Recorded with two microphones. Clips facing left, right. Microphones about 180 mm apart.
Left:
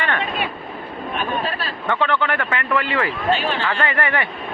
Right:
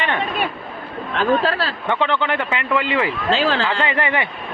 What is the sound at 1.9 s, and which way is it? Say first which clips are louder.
Speech: even; 20° right (ahead or behind).